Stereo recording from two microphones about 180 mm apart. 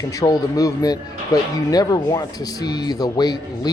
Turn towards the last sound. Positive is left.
turn(degrees=20)  # may be behind; listen again after turning